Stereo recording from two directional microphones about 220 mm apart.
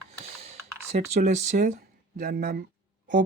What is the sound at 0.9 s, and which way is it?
Speech, 30° right (ahead or behind).